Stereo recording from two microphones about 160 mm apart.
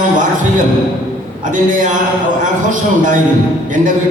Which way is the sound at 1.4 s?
55° right (ahead or behind).